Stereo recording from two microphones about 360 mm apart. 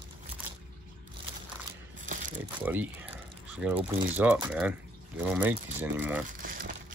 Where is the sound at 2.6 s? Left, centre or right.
Centre.